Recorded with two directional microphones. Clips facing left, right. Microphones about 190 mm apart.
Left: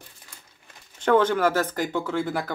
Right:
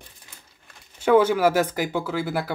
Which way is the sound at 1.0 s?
10° right (ahead or behind).